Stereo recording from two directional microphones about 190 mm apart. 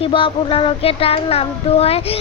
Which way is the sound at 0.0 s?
25° left (ahead or behind).